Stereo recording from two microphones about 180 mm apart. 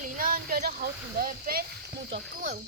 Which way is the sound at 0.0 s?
50° right (ahead or behind).